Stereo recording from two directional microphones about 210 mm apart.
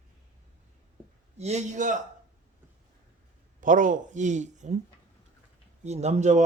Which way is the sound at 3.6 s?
40° right (ahead or behind).